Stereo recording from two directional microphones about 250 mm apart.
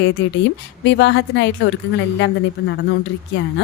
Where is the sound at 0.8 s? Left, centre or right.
Left.